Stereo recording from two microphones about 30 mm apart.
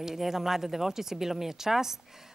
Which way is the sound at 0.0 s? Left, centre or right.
Centre.